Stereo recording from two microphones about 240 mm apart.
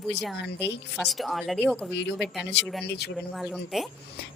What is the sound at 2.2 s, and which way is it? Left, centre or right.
Speech, left.